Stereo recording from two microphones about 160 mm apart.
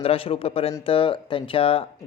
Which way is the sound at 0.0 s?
35° left (ahead or behind).